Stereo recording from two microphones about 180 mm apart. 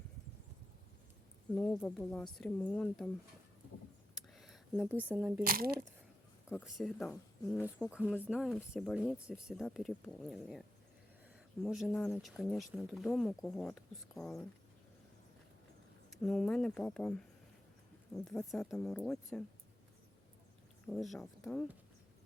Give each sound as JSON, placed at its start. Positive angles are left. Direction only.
{"t": 1.5, "sound": "speech", "side_deg": 5}
{"t": 4.1, "sound": "a sound", "side_deg": 0}
{"t": 4.9, "sound": "speech", "side_deg": -10}
{"t": 5.5, "sound": "speech", "side_deg": -55}
{"t": 6.7, "sound": "speech", "side_deg": 0}
{"t": 11.6, "sound": "speech", "side_deg": 0}
{"t": 16.0, "sound": "speech", "side_deg": 0}
{"t": 20.8, "sound": "speech", "side_deg": 0}